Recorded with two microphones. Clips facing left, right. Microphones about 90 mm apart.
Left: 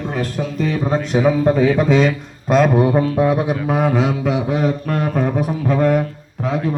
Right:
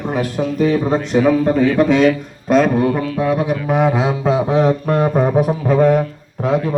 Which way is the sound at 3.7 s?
20° right (ahead or behind).